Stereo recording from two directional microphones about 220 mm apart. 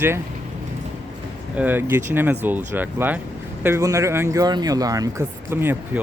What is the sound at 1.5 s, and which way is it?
Speech, 10° right (ahead or behind).